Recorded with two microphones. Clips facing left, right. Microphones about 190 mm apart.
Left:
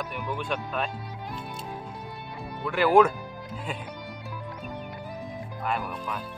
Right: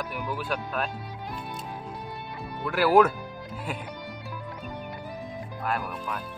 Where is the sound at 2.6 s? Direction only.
5° right (ahead or behind).